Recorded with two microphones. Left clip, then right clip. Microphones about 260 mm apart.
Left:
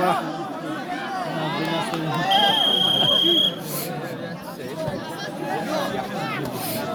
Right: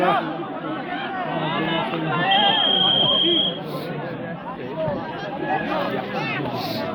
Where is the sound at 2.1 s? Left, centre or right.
Left.